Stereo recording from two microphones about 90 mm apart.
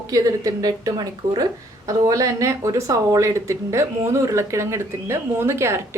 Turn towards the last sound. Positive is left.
turn(degrees=-30)  # may be behind; listen again after turning